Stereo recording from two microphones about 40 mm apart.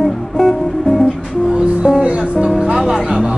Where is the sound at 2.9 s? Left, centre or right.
Centre.